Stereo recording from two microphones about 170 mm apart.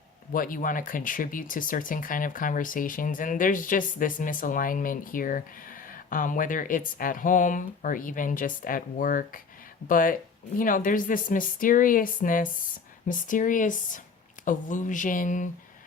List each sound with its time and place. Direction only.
0.3 s speech: 55° left (ahead or behind)